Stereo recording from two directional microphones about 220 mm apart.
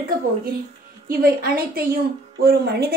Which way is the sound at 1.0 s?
40° right (ahead or behind).